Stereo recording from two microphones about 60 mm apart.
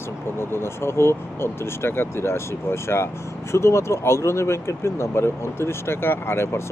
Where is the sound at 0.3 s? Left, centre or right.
Left.